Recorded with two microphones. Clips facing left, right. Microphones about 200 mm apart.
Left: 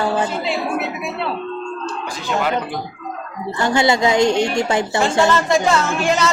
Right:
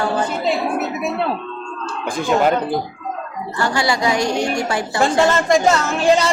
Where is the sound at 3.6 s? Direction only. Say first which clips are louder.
Left 3 dB; 20° left (ahead or behind).